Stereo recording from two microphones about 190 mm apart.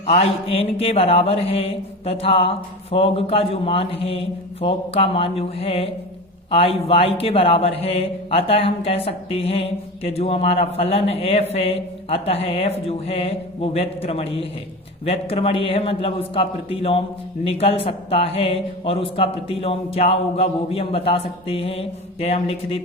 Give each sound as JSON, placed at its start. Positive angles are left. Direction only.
{"t": 0.0, "sound": "a man's voice", "side_deg": 30}